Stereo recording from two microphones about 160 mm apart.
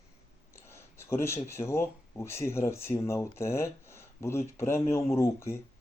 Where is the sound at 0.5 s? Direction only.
15° left (ahead or behind).